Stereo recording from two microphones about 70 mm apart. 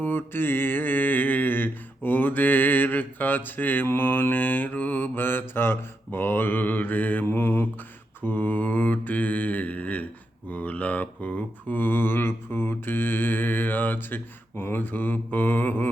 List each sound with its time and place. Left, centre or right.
0.0 s mantra: left